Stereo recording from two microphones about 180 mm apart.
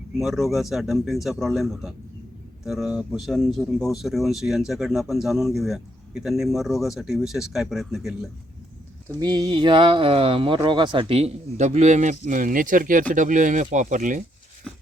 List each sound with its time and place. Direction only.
0.2 s speech: centre (ahead or behind)
9.0 s speech: 20° right (ahead or behind); by 14.2 s 45° right (ahead or behind)
14.7 s a sound: 5° left (ahead or behind)